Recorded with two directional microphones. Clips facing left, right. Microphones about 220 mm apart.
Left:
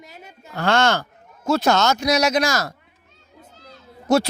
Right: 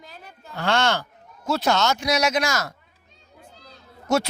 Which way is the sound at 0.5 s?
45° left (ahead or behind).